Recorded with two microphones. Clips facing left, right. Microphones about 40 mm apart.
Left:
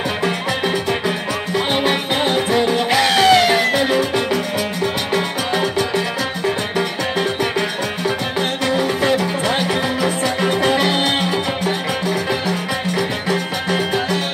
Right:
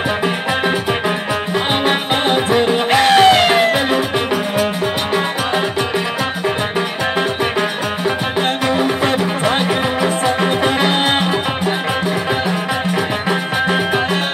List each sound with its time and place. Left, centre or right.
0.2 s music: right
8.4 s music: right